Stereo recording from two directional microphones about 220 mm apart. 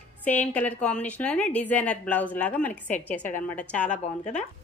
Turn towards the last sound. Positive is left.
turn(degrees=30)  # may be behind; listen again after turning